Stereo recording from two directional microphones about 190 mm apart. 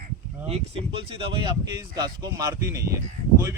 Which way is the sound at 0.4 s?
30° right (ahead or behind).